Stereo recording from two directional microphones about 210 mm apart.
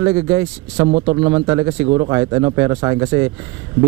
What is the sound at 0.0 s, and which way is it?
Speech, 15° right (ahead or behind).